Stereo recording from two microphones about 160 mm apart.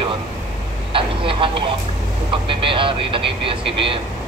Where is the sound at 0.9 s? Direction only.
35° right (ahead or behind).